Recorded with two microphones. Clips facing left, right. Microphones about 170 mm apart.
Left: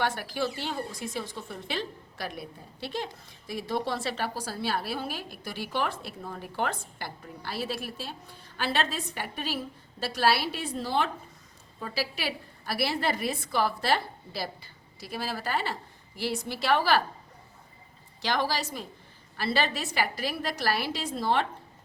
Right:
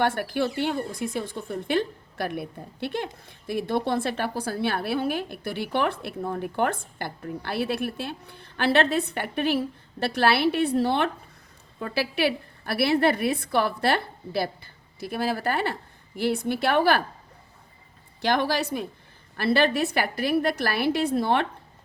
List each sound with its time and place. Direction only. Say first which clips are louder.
0.0 s speech: right 5 dB; 55° right (ahead or behind)
18.2 s speech: right 5 dB; 55° right (ahead or behind)